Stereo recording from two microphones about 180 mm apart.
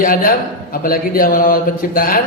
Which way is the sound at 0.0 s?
50° left (ahead or behind).